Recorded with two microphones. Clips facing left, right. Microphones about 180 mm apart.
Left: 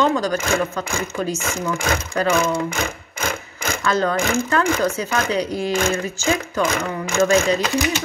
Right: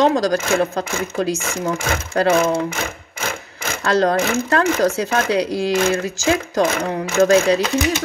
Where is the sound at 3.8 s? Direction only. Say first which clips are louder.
Right 4 dB; 80° right.